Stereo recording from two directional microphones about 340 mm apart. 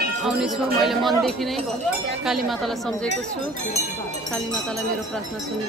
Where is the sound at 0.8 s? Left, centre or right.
Centre.